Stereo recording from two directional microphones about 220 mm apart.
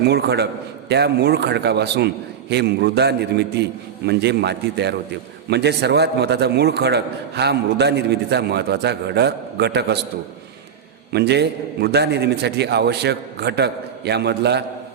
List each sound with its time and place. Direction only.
0.0 s a man's voice: 50° right (ahead or behind)
11.1 s a man's voice: 50° right (ahead or behind)